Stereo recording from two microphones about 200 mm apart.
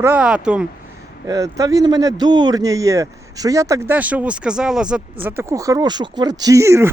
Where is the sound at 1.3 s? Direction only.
15° right (ahead or behind).